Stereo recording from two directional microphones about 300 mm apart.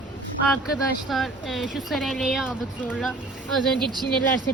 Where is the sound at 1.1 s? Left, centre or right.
Centre.